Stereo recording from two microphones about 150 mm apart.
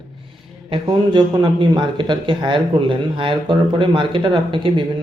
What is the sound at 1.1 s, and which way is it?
Speech, 30° right (ahead or behind).